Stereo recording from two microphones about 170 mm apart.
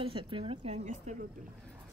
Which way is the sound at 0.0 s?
30° right (ahead or behind).